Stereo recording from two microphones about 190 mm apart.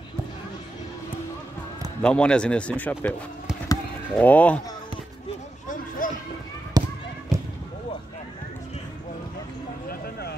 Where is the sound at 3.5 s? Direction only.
5° right (ahead or behind).